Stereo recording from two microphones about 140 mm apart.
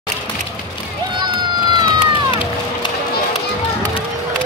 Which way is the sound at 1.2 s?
30° right (ahead or behind).